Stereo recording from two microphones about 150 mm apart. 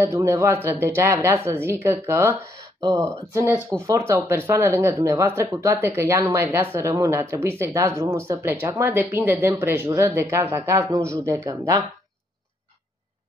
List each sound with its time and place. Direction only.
0.0 s a woman's voice: 20° right (ahead or behind)